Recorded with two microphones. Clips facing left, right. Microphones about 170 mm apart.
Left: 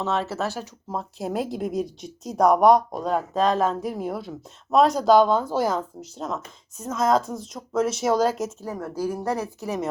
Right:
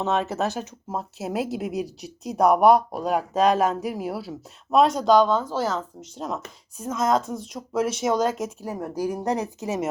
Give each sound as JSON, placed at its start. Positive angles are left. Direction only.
{"t": 0.0, "sound": "a woman's voice", "side_deg": -15}
{"t": 0.9, "sound": "speech", "side_deg": -5}
{"t": 6.1, "sound": "speech", "side_deg": 0}
{"t": 8.4, "sound": "a woman's voice", "side_deg": -15}